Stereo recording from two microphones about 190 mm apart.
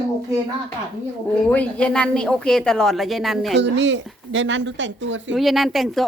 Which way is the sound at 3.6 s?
70° right (ahead or behind).